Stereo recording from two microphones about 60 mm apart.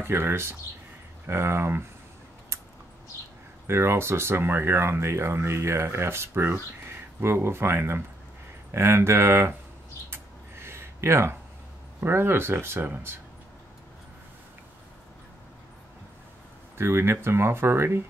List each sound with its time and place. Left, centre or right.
0.0 s speech: right
3.6 s speech: right
10.0 s a sound: right
12.0 s speech: right
16.7 s speech: right